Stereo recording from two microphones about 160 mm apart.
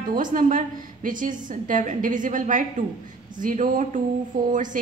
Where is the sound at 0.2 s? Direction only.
55° right (ahead or behind).